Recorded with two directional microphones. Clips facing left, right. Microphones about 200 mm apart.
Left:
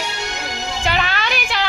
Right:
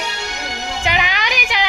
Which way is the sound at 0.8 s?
15° right (ahead or behind).